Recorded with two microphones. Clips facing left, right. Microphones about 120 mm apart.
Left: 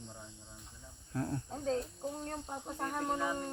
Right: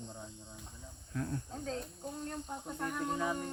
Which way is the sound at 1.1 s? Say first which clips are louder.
Left 2 dB; 30° left (ahead or behind).